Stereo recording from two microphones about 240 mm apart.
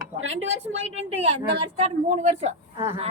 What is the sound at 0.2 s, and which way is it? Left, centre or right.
Speech, right.